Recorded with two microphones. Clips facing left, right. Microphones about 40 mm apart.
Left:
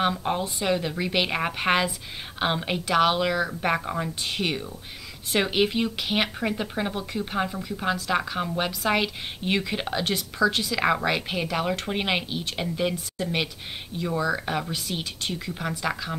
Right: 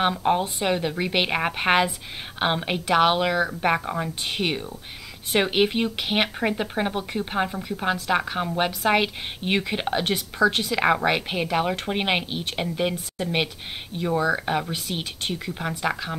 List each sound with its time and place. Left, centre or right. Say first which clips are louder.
0.0 s speech: right 3 dB; centre
3.4 s speech: right 2 dB; centre